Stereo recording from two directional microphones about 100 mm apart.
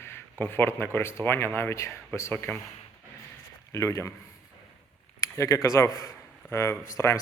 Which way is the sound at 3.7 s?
30° left (ahead or behind).